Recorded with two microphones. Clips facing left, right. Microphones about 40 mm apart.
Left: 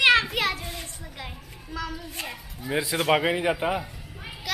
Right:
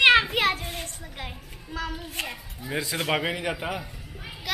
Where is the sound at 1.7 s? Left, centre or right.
Right.